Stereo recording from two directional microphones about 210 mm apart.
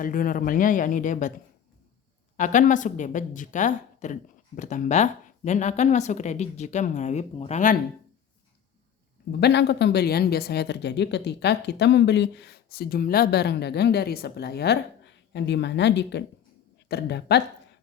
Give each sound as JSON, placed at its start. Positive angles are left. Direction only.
{"t": 0.0, "sound": "a woman's voice", "side_deg": 40}
{"t": 2.3, "sound": "a woman's voice", "side_deg": 35}
{"t": 9.4, "sound": "speech", "side_deg": 55}